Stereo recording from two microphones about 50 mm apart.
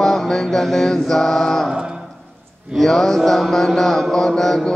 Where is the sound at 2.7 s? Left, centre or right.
Centre.